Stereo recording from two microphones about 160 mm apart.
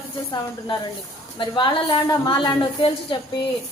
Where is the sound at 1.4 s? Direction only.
30° left (ahead or behind).